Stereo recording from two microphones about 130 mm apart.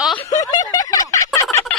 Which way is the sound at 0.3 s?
30° left (ahead or behind).